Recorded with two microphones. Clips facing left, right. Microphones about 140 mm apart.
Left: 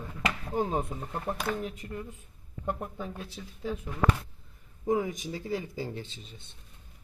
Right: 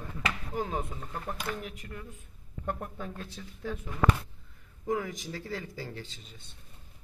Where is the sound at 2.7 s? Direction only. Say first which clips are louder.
Left 2 dB; 15° left (ahead or behind).